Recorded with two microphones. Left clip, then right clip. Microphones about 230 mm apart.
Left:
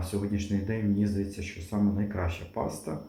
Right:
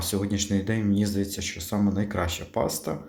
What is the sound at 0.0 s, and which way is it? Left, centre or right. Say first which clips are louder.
Speech: right 5 dB; right.